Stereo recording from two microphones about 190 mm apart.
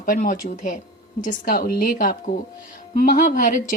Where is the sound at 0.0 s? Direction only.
45° left (ahead or behind).